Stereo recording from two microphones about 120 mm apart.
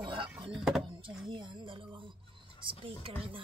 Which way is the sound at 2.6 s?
45° right (ahead or behind).